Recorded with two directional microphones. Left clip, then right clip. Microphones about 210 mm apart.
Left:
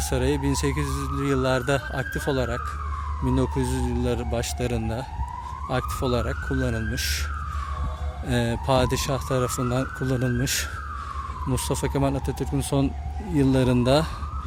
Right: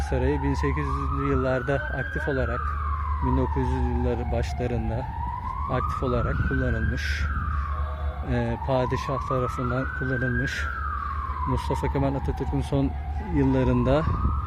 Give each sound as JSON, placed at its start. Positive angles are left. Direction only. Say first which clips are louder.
{"t": 0.1, "sound": "speech", "louder": "left 1 dB", "side_deg": 25}
{"t": 8.3, "sound": "speech", "louder": "left 3 dB", "side_deg": 25}